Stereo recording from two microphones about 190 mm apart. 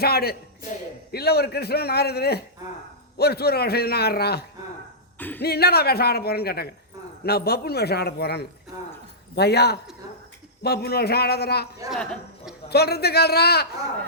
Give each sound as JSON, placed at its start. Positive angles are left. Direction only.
{"t": 0.0, "sound": "a woman's voice", "side_deg": 55}
{"t": 5.1, "sound": "speech", "side_deg": 10}
{"t": 5.4, "sound": "a woman's voice", "side_deg": 55}
{"t": 11.9, "sound": "a woman's voice", "side_deg": 0}
{"t": 12.6, "sound": "a woman's voice", "side_deg": 55}